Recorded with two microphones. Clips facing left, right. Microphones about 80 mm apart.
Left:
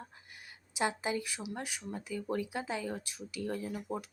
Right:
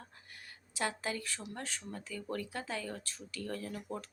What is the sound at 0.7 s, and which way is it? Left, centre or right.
Speech, centre.